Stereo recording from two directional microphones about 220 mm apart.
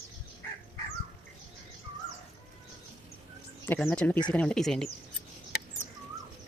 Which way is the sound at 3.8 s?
5° left (ahead or behind).